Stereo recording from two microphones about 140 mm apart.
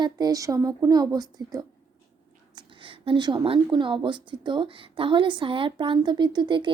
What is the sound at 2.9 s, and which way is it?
Speech, 35° right (ahead or behind).